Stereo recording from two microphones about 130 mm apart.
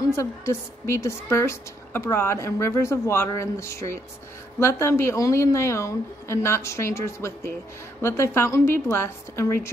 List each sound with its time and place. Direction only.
0.1 s a woman's voice: 20° left (ahead or behind)